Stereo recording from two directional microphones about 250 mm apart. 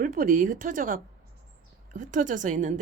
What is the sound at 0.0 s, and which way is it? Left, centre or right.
A woman's voice, right.